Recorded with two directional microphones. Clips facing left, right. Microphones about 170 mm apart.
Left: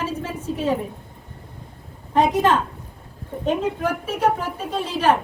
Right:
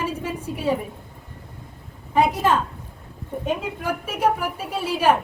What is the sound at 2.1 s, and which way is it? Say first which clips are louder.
A woman's voice: left 2 dB; 10° right (ahead or behind).